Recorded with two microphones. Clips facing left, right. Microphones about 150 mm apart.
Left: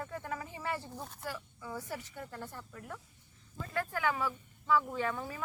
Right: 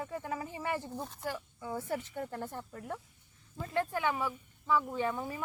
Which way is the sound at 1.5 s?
25° right (ahead or behind).